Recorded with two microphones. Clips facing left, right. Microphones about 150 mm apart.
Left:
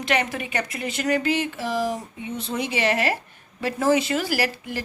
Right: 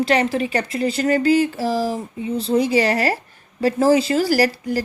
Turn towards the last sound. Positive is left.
turn(degrees=-40)  # may be behind; listen again after turning